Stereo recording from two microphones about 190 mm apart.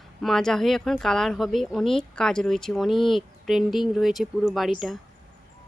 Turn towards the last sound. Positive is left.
turn(degrees=0)  # may be behind; listen again after turning